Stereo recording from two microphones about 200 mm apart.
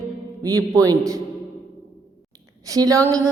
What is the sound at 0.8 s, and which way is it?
Speech, 15° right (ahead or behind).